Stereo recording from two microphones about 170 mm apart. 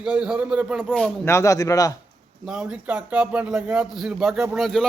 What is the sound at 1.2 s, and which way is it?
Speech, 15° left (ahead or behind).